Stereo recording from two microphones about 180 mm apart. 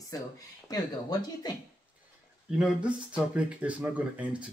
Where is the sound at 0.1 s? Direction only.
20° left (ahead or behind).